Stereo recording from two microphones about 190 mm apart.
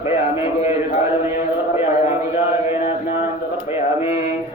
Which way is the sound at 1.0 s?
15° right (ahead or behind).